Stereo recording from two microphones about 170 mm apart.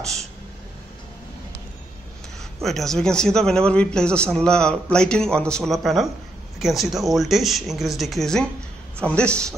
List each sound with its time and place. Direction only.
2.6 s a man's voice: centre (ahead or behind)